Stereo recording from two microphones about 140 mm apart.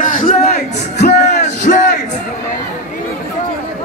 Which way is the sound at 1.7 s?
70° left (ahead or behind).